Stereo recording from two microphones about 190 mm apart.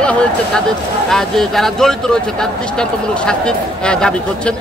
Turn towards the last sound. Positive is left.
turn(degrees=5)  # may be behind; listen again after turning